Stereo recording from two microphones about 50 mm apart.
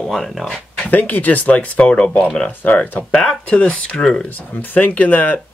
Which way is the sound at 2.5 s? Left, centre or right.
Left.